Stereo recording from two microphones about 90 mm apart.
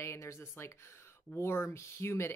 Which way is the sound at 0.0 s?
30° left (ahead or behind).